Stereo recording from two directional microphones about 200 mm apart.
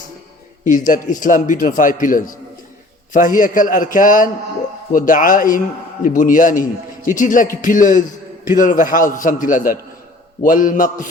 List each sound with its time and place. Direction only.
0.6 s a man's voice: 40° left (ahead or behind)